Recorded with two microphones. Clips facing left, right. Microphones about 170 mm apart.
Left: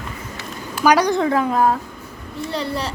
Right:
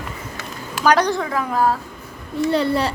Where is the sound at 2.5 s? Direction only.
55° right (ahead or behind).